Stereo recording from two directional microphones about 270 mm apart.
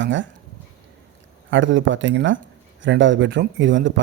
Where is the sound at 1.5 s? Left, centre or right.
Right.